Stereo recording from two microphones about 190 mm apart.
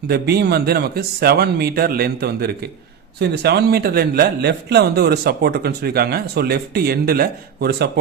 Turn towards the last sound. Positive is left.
turn(degrees=-55)  # may be behind; listen again after turning